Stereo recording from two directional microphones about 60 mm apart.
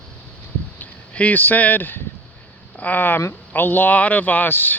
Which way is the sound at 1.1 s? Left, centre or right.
Left.